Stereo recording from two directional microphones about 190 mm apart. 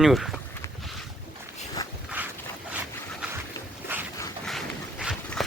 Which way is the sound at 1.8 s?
20° left (ahead or behind).